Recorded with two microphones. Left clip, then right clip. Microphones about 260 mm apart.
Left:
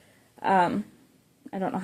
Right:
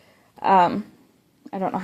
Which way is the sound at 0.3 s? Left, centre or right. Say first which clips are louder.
Right 6 dB; right.